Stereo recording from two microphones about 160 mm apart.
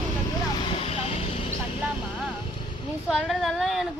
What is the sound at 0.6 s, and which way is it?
Vehicle, 35° left (ahead or behind).